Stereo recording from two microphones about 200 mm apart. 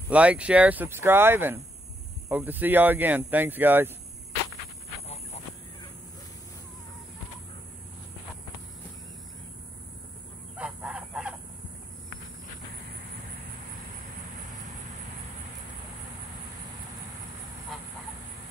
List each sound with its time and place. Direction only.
0.1 s speech: 5° right (ahead or behind)
5.0 s a sound: 30° left (ahead or behind)
10.6 s fowl: 5° right (ahead or behind)